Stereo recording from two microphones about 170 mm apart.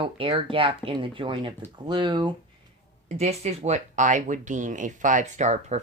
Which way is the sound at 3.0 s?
40° right (ahead or behind).